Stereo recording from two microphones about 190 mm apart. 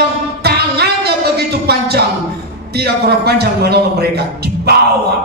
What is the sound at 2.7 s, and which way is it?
A man's voice, 55° right (ahead or behind).